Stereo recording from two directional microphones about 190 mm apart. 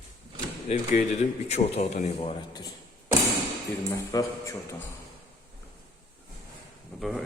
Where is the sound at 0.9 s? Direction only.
40° left (ahead or behind); by 2.7 s 25° left (ahead or behind).